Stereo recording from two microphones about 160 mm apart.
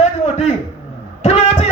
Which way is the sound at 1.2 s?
40° left (ahead or behind).